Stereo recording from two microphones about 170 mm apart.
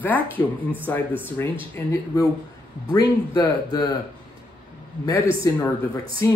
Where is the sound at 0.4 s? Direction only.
10° right (ahead or behind).